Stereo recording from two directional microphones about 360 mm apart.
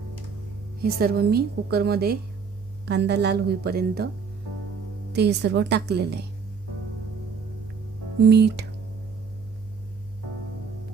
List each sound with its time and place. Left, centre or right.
0.8 s a woman's voice: right
5.1 s a woman's voice: right
8.2 s a woman's voice: right